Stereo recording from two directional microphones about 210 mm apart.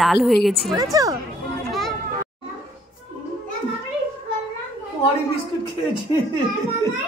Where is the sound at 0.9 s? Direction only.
15° right (ahead or behind).